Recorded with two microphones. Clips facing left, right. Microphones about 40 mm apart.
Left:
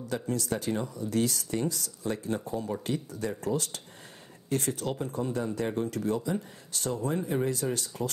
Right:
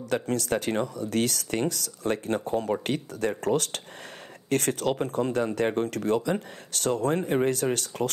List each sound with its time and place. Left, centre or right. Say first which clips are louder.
0.0 s speech: right 4 dB; right